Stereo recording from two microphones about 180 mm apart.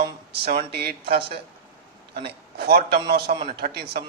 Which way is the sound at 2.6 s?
60° right (ahead or behind).